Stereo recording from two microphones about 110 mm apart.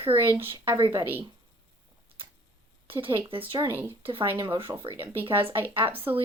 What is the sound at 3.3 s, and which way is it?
Speech, 50° right (ahead or behind).